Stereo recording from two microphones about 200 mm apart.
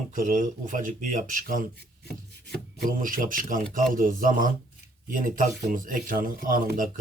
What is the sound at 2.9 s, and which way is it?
Speech, 45° right (ahead or behind).